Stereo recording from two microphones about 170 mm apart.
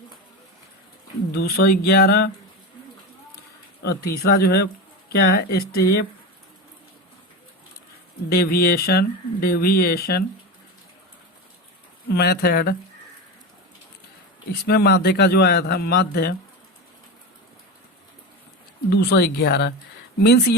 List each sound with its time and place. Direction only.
1.3 s a man's voice: 70° left (ahead or behind)
3.8 s a man's voice: 70° left (ahead or behind)
8.3 s speech: 65° left (ahead or behind)
12.0 s a man's voice: 70° left (ahead or behind)
14.7 s a man's voice: 70° left (ahead or behind)
18.9 s a man's voice: 75° left (ahead or behind)